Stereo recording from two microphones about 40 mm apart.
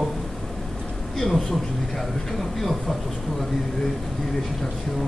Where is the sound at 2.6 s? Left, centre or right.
Centre.